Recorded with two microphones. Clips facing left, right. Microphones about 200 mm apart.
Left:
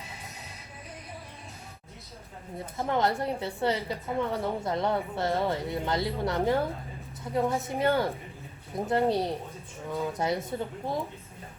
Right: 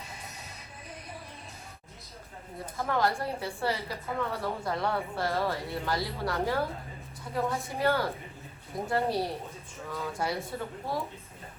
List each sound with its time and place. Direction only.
2.7 s a woman's voice: 20° left (ahead or behind)